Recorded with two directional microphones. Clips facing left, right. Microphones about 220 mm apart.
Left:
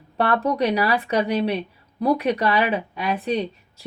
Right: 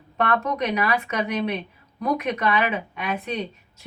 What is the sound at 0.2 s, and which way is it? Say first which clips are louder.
Speech: left 3 dB; 35° left (ahead or behind).